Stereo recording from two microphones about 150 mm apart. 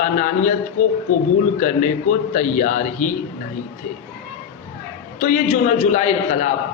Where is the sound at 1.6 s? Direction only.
55° left (ahead or behind).